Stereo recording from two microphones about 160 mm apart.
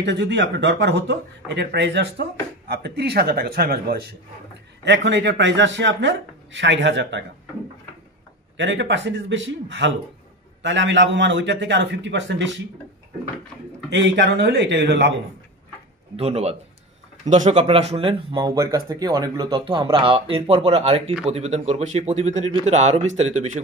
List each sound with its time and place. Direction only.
0.0 s a man's voice: 90° right
4.8 s speech: 90° right
9.8 s speech: 90° right
13.8 s speech: 90° right
16.2 s speech: 40° right (ahead or behind)